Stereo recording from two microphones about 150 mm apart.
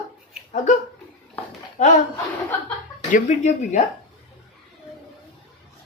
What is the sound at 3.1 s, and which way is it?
Speech, 50° left (ahead or behind).